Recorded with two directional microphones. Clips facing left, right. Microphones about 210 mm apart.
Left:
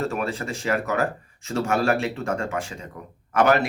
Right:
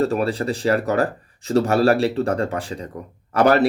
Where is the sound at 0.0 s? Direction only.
35° right (ahead or behind).